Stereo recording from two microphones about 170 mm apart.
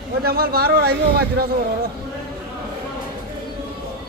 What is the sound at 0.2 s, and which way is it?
A man's voice, 65° right (ahead or behind).